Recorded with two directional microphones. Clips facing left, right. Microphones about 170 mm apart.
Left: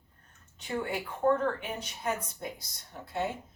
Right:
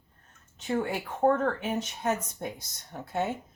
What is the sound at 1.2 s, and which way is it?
Speech, 35° right (ahead or behind).